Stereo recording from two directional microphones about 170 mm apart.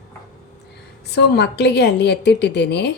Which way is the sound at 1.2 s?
75° left (ahead or behind).